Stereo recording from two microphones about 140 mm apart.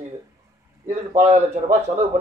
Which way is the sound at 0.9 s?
50° right (ahead or behind).